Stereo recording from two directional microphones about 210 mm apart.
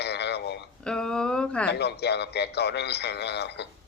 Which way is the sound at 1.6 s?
50° left (ahead or behind).